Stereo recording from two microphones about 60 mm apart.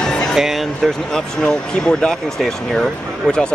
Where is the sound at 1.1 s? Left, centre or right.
Centre.